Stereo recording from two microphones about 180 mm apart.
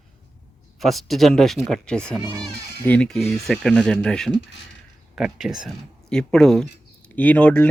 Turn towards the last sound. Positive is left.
turn(degrees=10)  # may be behind; listen again after turning